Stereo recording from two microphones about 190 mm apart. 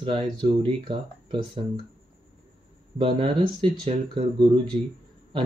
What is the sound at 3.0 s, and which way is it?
Speech, 30° right (ahead or behind).